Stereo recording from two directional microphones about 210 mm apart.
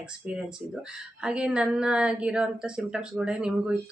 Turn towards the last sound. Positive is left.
turn(degrees=-5)  # may be behind; listen again after turning